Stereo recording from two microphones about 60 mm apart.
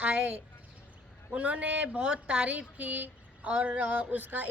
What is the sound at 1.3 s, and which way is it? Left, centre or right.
A woman's voice, right.